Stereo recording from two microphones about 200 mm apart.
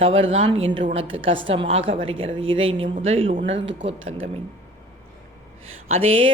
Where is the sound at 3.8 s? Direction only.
75° right (ahead or behind).